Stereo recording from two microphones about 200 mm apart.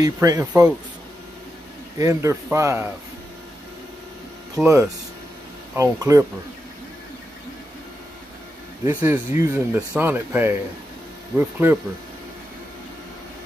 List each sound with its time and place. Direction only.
0.0 s speech: 15° right (ahead or behind)
2.0 s speech: 15° right (ahead or behind)
4.6 s speech: 5° right (ahead or behind)
5.8 s speech: 15° right (ahead or behind)
8.8 s speech: 10° right (ahead or behind)